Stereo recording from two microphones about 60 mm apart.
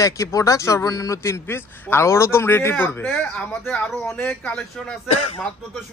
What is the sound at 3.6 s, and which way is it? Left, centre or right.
Speech, centre.